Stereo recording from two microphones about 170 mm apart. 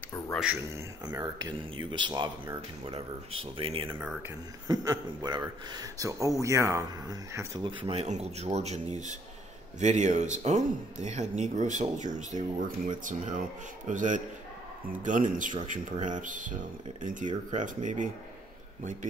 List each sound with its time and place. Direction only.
0.3 s speech: 5° right (ahead or behind)
1.0 s a man's voice: 25° right (ahead or behind); by 18.1 s 45° right (ahead or behind)